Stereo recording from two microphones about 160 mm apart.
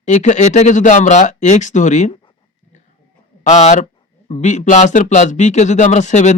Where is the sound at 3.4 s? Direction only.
45° left (ahead or behind).